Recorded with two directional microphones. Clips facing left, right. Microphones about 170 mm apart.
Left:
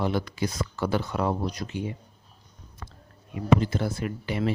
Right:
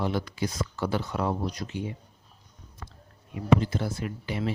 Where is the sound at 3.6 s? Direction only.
65° left (ahead or behind).